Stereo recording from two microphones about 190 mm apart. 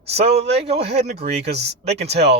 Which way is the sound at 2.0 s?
35° right (ahead or behind).